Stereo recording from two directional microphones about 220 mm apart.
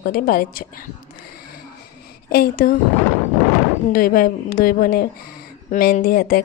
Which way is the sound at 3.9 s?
40° left (ahead or behind).